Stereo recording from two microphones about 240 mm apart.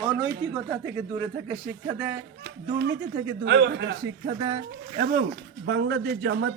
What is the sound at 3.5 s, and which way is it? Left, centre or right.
Speech, right.